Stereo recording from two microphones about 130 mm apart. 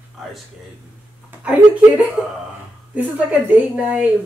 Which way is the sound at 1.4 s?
10° right (ahead or behind).